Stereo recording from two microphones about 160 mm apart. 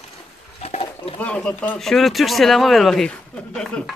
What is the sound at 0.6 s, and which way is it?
Goat, 40° left (ahead or behind).